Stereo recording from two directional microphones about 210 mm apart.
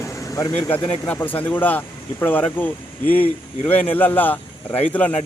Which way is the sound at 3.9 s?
10° left (ahead or behind).